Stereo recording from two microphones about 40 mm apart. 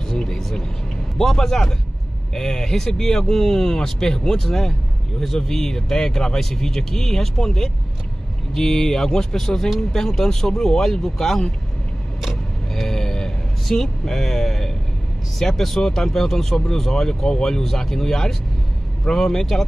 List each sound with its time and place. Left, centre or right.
0.1 s vehicle: centre
1.1 s speech: centre
12.7 s a sound: centre
15.3 s speech: centre